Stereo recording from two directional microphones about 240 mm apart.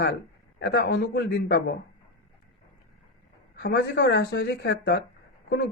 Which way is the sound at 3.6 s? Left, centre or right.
Left.